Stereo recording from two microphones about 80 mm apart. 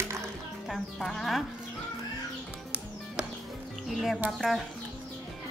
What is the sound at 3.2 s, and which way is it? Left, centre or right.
Music, centre.